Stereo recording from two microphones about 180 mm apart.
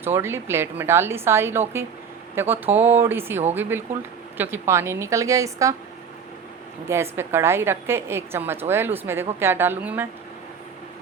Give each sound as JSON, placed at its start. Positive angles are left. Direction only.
{"t": 0.0, "sound": "a woman's voice", "side_deg": -15}
{"t": 6.8, "sound": "a woman's voice", "side_deg": -15}